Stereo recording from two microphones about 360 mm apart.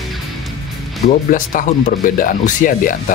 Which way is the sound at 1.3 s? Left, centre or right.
Left.